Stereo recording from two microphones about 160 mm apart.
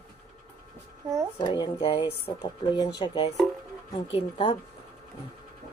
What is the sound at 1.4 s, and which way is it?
Speech, 30° left (ahead or behind).